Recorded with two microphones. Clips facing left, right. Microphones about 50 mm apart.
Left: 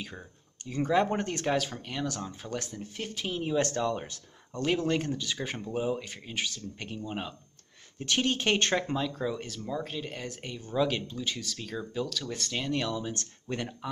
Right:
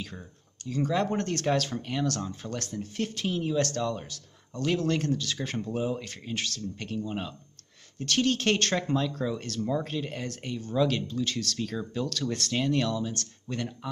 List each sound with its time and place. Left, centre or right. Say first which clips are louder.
0.0 s speech: right 1 dB; centre
0.7 s speech: left 1 dB; left
1.1 s speech: right 2 dB; centre
3.5 s speech: even; centre
4.6 s speech: right 1 dB; centre
12.9 s speech: right 2 dB; left